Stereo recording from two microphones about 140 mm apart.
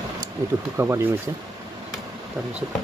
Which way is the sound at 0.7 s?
15° right (ahead or behind).